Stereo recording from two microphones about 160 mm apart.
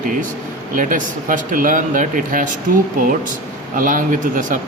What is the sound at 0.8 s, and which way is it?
Speech, 55° right (ahead or behind).